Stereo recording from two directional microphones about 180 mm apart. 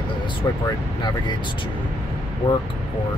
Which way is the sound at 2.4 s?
25° left (ahead or behind).